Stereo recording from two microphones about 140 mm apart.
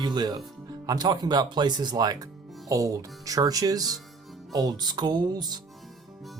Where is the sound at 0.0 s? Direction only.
30° right (ahead or behind).